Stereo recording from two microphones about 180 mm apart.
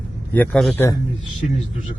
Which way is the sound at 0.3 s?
Centre (ahead or behind).